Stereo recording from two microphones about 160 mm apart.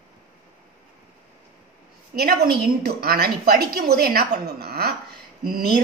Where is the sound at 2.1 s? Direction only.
75° right (ahead or behind).